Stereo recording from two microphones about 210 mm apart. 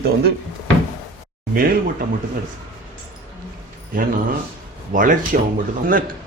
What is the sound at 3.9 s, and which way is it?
A man's voice, 40° right (ahead or behind).